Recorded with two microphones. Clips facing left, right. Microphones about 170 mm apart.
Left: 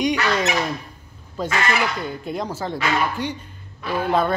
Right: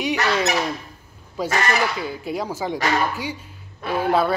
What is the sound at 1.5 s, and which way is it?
Speech, 40° right (ahead or behind).